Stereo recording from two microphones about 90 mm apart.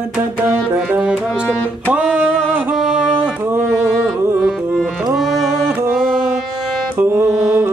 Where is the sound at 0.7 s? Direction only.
10° right (ahead or behind).